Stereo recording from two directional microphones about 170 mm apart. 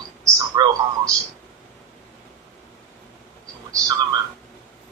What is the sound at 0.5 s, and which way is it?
Speech, 20° right (ahead or behind).